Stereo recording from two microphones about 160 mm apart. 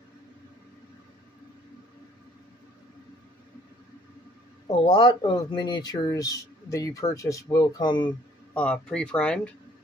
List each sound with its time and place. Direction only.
4.6 s speech: 30° left (ahead or behind)
8.5 s speech: 5° left (ahead or behind)